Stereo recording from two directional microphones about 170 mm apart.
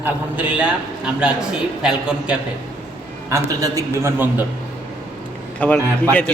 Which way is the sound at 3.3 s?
20° right (ahead or behind).